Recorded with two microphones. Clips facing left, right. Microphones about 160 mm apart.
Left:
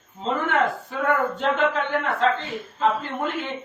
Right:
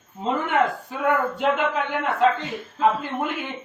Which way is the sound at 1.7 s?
15° right (ahead or behind).